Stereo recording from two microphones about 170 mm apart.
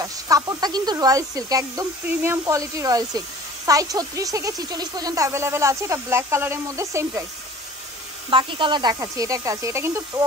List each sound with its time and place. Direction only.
0.0 s speech: 20° right (ahead or behind)
8.3 s speech: 30° right (ahead or behind)